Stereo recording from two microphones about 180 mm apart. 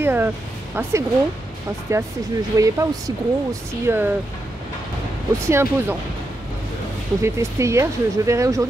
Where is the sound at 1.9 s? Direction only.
15° right (ahead or behind).